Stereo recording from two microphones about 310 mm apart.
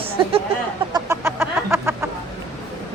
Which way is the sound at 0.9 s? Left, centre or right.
Centre.